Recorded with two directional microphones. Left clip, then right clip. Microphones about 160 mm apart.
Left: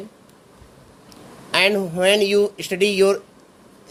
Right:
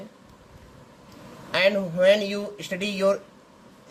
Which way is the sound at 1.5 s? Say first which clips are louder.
Left 4 dB; 45° left (ahead or behind).